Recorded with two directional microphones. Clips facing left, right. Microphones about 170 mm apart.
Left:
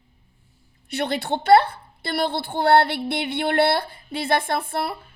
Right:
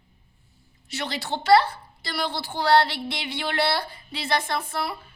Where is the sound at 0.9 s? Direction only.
55° left (ahead or behind).